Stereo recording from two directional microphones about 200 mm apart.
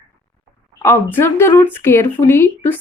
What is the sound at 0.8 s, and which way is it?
Speech, 15° left (ahead or behind).